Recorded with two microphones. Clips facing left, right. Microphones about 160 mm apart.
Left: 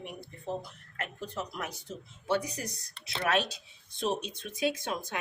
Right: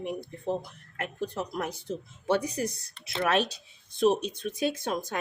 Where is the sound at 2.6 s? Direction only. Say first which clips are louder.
Right 8 dB; 50° right (ahead or behind).